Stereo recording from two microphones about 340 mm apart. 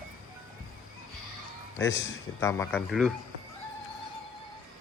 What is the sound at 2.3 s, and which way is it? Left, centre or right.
Speech, centre.